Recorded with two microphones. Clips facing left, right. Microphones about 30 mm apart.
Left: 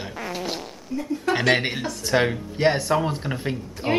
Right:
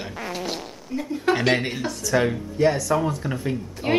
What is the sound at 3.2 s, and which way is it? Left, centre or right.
Speech, centre.